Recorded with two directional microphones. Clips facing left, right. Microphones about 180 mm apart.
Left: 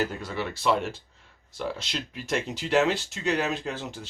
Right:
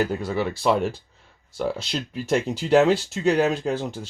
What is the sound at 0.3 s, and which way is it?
Speech, 40° right (ahead or behind).